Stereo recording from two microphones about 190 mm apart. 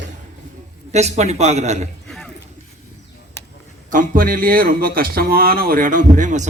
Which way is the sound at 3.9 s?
45° right (ahead or behind).